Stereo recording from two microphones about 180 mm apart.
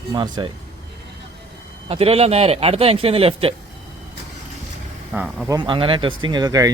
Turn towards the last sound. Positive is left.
turn(degrees=-20)  # may be behind; listen again after turning